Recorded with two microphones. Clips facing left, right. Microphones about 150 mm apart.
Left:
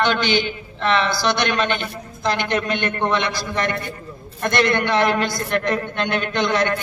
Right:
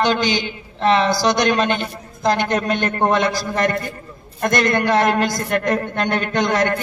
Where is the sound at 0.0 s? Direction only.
40° right (ahead or behind).